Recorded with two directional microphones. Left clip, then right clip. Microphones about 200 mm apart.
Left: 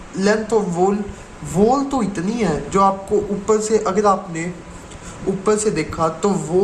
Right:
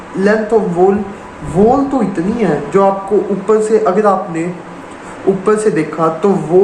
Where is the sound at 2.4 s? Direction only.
60° left (ahead or behind).